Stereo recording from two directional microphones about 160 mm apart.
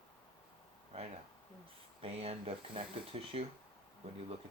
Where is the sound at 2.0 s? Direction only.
35° right (ahead or behind).